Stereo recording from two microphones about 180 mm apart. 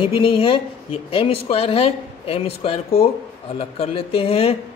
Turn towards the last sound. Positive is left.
turn(degrees=35)  # may be behind; listen again after turning